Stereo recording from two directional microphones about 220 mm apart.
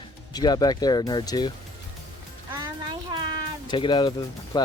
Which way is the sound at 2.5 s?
15° right (ahead or behind).